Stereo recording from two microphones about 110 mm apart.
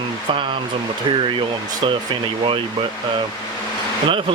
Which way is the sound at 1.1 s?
50° right (ahead or behind).